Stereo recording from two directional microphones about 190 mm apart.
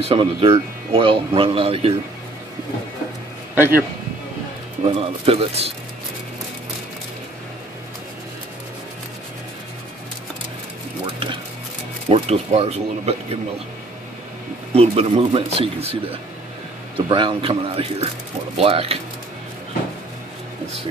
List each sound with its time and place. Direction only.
0.0 s speech: 30° right (ahead or behind)
3.5 s a man's voice: 10° right (ahead or behind)
4.8 s speech: 30° right (ahead or behind)
12.1 s speech: 30° right (ahead or behind)
14.7 s speech: 30° right (ahead or behind)